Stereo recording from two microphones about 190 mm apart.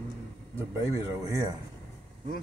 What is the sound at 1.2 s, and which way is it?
Speech, 15° right (ahead or behind).